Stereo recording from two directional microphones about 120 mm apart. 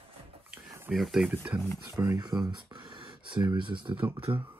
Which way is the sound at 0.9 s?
Centre (ahead or behind).